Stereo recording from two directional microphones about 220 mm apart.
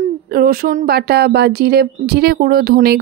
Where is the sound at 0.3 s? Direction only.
40° right (ahead or behind).